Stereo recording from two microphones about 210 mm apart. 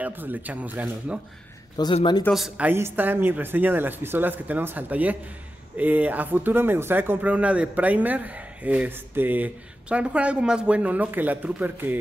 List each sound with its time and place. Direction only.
0.0 s speech: 10° right (ahead or behind)
1.8 s speech: 20° left (ahead or behind)
2.2 s speech: centre (ahead or behind)